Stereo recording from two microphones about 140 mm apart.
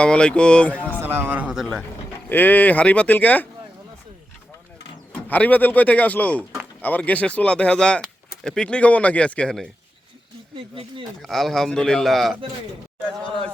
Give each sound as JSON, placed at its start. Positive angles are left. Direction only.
{"t": 0.0, "sound": "speech", "side_deg": 5}
{"t": 1.0, "sound": "speech", "side_deg": -15}
{"t": 2.3, "sound": "speech", "side_deg": 10}
{"t": 5.3, "sound": "speech", "side_deg": 10}
{"t": 10.5, "sound": "speech", "side_deg": -35}
{"t": 11.2, "sound": "a man's voice", "side_deg": 0}